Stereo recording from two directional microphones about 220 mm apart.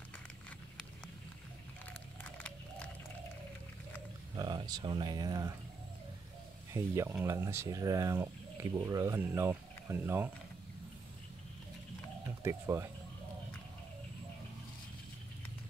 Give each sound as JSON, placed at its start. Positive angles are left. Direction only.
{"t": 2.2, "sound": "a sound", "side_deg": 5}
{"t": 4.4, "sound": "speech", "side_deg": -20}
{"t": 6.7, "sound": "speech", "side_deg": -10}
{"t": 12.4, "sound": "speech", "side_deg": -10}